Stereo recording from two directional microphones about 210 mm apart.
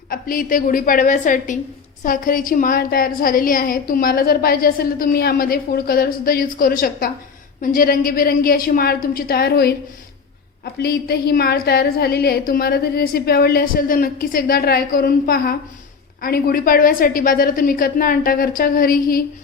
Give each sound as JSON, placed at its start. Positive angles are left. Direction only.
{"t": 0.1, "sound": "a woman's voice", "side_deg": 40}
{"t": 10.8, "sound": "a woman's voice", "side_deg": 50}